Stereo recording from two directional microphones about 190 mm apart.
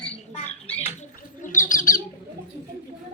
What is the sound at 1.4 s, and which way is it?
Bird, 45° left (ahead or behind).